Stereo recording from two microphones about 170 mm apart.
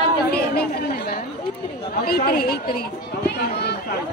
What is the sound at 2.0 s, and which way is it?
Speech, 65° left (ahead or behind).